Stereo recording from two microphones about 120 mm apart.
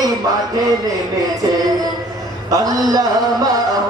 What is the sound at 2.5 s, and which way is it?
A man's voice, 30° right (ahead or behind).